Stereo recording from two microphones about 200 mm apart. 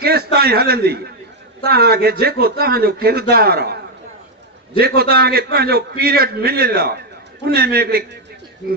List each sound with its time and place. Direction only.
0.0 s a man's voice: 50° right (ahead or behind)